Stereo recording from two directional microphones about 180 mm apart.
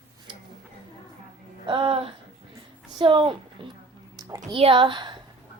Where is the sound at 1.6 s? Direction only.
30° right (ahead or behind).